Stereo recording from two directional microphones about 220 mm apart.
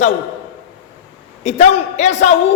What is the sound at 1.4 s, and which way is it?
Speech, 30° left (ahead or behind).